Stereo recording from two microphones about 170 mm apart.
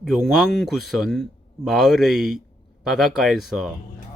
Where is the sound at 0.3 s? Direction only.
Centre (ahead or behind).